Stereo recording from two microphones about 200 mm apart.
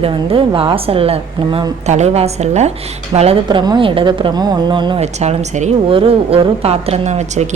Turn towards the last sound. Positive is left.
turn(degrees=-35)  # may be behind; listen again after turning